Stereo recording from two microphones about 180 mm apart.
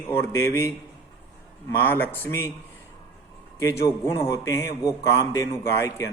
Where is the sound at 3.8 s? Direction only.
15° left (ahead or behind).